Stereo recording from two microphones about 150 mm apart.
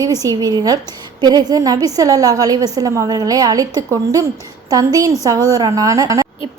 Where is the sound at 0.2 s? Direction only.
25° right (ahead or behind).